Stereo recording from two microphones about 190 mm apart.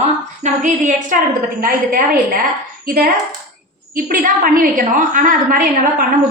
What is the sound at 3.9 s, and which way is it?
A woman's voice, 45° right (ahead or behind).